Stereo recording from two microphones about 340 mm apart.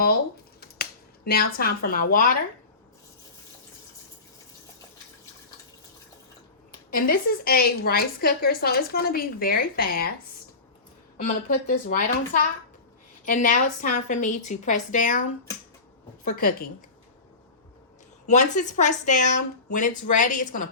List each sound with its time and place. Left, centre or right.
0.6 s a sound: left
6.9 s a woman's voice: left
11.2 s a woman's voice: left
16.2 s a woman's voice: left
18.3 s a woman's voice: left